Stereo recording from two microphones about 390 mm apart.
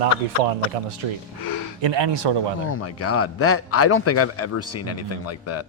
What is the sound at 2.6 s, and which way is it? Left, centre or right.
A man's voice, left.